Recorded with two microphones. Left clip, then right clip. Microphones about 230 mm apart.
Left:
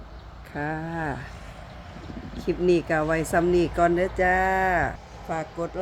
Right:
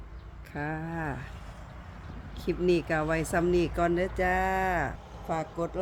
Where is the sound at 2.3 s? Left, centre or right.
Centre.